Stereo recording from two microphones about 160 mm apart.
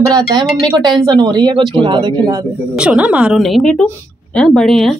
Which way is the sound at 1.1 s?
30° right (ahead or behind).